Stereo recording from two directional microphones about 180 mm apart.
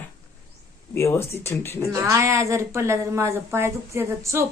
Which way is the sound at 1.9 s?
15° right (ahead or behind).